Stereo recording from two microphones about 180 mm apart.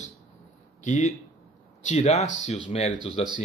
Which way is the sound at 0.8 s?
40° left (ahead or behind).